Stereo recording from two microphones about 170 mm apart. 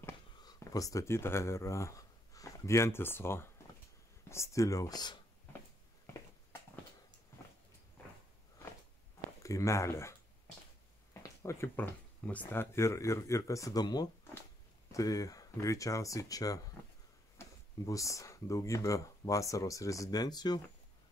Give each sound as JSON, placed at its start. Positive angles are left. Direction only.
{"t": 0.0, "sound": "speech", "side_deg": 20}
{"t": 9.4, "sound": "speech", "side_deg": 20}
{"t": 11.4, "sound": "speech", "side_deg": 15}
{"t": 17.8, "sound": "speech", "side_deg": 20}